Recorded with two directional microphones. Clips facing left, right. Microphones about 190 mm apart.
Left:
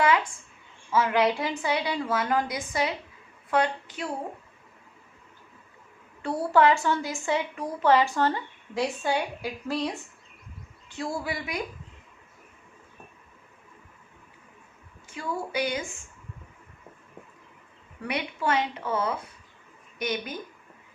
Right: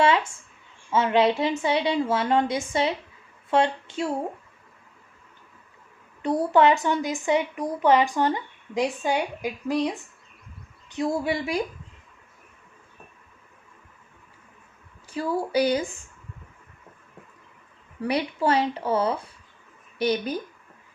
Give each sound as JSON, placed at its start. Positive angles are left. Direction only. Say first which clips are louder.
{"t": 0.0, "sound": "a woman's voice", "louder": "right 2 dB", "side_deg": -25}
{"t": 6.2, "sound": "a woman's voice", "louder": "right 2 dB", "side_deg": -20}
{"t": 15.1, "sound": "speech", "louder": "right 7 dB", "side_deg": -35}
{"t": 18.0, "sound": "speech", "louder": "right 5 dB", "side_deg": -35}